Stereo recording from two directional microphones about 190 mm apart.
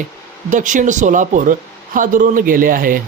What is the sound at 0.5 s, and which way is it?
Speech, 40° right (ahead or behind).